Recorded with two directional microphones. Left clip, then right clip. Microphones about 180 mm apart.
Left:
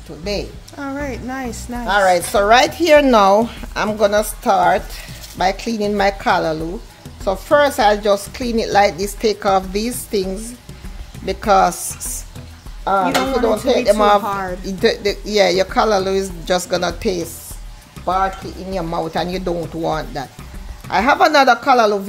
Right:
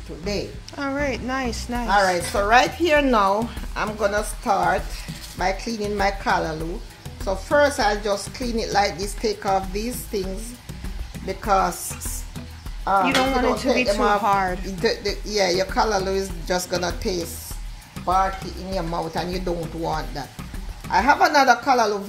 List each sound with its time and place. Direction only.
0.7 s speech: 5° left (ahead or behind)
1.9 s a woman's voice: 65° left (ahead or behind)
11.2 s a woman's voice: 65° left (ahead or behind)
12.8 s a woman's voice: 60° left (ahead or behind)
14.2 s speech: centre (ahead or behind)
14.8 s a woman's voice: 55° left (ahead or behind)
18.0 s a sound: centre (ahead or behind)
18.7 s a woman's voice: 50° left (ahead or behind)